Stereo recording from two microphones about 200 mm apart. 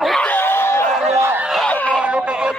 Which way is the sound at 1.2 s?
10° right (ahead or behind).